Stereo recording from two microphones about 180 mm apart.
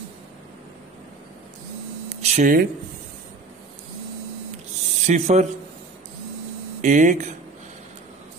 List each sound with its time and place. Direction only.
2.0 s speech: 45° right (ahead or behind)
5.0 s speech: 40° right (ahead or behind)
6.8 s speech: 45° right (ahead or behind)